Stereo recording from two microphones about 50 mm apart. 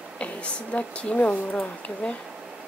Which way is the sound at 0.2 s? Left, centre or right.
Left.